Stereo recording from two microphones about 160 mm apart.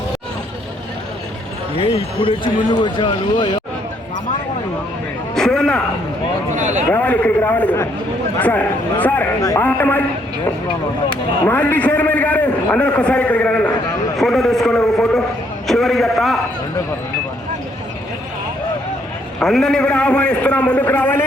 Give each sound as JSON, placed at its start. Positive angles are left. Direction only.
{"t": 1.8, "sound": "speech", "side_deg": 35}
{"t": 5.3, "sound": "a sound", "side_deg": 5}
{"t": 6.6, "sound": "speech", "side_deg": -50}
{"t": 6.8, "sound": "a man's voice", "side_deg": 10}
{"t": 9.4, "sound": "a man's voice", "side_deg": 20}
{"t": 11.4, "sound": "a man's voice", "side_deg": 10}
{"t": 19.4, "sound": "a man's voice", "side_deg": 0}